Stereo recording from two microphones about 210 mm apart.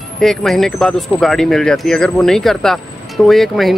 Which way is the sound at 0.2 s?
Centre (ahead or behind).